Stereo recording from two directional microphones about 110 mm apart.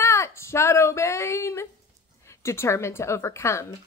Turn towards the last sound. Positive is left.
turn(degrees=25)  # may be behind; listen again after turning